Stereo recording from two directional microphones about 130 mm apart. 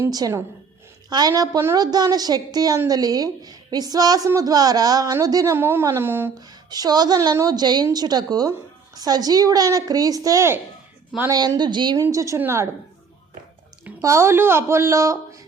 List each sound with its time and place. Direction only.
0.1 s a woman's voice: 30° right (ahead or behind)
6.5 s a woman's voice: 30° right (ahead or behind)
11.9 s a woman's voice: 25° right (ahead or behind)
14.0 s a woman's voice: 20° right (ahead or behind)